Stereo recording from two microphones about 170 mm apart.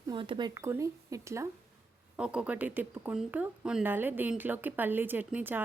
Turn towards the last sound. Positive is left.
turn(degrees=-10)  # may be behind; listen again after turning